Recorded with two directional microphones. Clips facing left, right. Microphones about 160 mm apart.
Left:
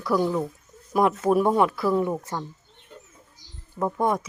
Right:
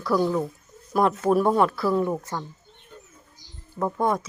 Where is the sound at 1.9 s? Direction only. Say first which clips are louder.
Even; 5° left (ahead or behind).